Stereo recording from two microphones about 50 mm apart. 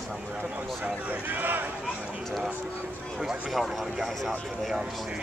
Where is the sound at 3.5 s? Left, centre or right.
Centre.